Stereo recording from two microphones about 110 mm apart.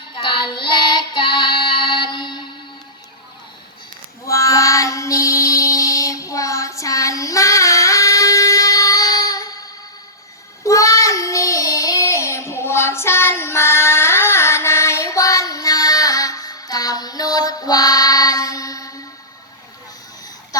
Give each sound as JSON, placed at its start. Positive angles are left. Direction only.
{"t": 0.2, "sound": "child singing", "side_deg": 50}
{"t": 4.3, "sound": "child singing", "side_deg": 30}
{"t": 10.6, "sound": "child singing", "side_deg": 30}